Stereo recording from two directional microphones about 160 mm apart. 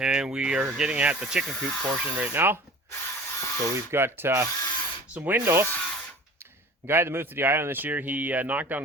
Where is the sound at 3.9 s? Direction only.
15° right (ahead or behind).